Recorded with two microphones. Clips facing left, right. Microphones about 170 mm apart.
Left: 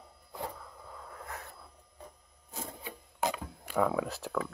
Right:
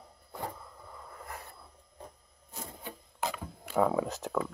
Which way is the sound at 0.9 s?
5° right (ahead or behind).